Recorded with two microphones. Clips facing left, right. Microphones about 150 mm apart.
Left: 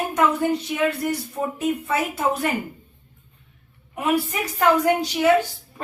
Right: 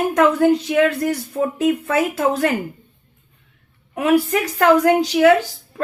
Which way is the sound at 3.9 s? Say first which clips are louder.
Right 6 dB; 90° right.